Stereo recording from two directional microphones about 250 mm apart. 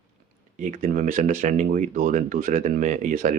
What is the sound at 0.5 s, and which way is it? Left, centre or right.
Speech, right.